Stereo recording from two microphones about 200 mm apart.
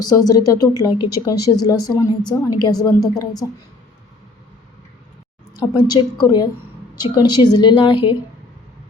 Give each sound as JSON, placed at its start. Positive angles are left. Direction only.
{"t": 0.0, "sound": "speech", "side_deg": 20}
{"t": 5.5, "sound": "speech", "side_deg": 20}